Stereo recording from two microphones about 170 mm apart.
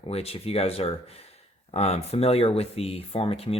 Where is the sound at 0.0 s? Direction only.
35° left (ahead or behind).